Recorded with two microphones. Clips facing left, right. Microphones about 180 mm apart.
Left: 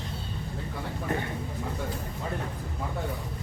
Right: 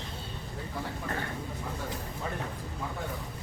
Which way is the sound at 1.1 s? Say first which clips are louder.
Left 6 dB; 20° left (ahead or behind).